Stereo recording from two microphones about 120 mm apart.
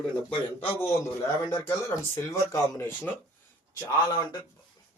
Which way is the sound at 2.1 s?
25° left (ahead or behind).